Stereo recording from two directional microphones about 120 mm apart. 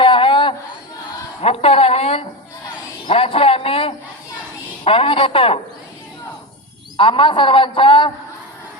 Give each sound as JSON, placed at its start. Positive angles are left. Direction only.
{"t": 0.0, "sound": "a sound", "side_deg": 45}
{"t": 1.4, "sound": "a man's voice", "side_deg": 55}
{"t": 6.9, "sound": "a man's voice", "side_deg": 45}